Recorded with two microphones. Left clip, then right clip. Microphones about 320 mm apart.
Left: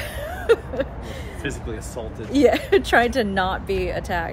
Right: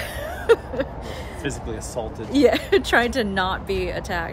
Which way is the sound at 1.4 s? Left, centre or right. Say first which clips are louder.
Even; right.